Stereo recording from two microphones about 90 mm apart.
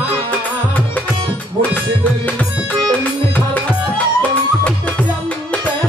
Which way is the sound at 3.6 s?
15° left (ahead or behind).